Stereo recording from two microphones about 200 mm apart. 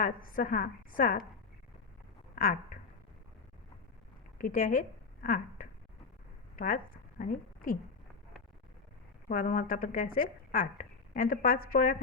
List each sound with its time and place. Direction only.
0.0 s speech: 45° left (ahead or behind)
2.3 s a sound: 45° left (ahead or behind)
4.4 s a woman's voice: 40° left (ahead or behind)
7.2 s a woman's voice: 40° left (ahead or behind)
9.3 s speech: 45° left (ahead or behind)